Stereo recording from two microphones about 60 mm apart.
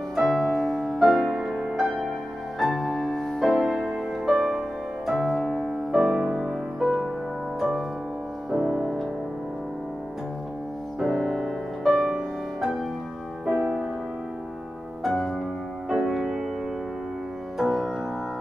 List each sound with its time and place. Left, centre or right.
0.1 s music: centre
8.5 s music: centre
11.0 s music: centre
13.5 s music: centre
15.0 s music: centre
17.6 s music: centre